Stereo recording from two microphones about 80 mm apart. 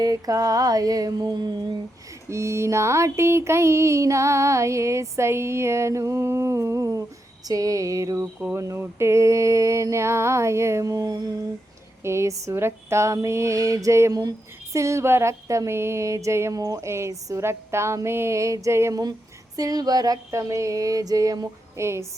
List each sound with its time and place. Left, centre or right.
0.0 s mantra: right
2.3 s mantra: right
12.0 s mantra: right
16.9 s mantra: right
19.5 s mantra: right
20.3 s mantra: right
21.8 s mantra: right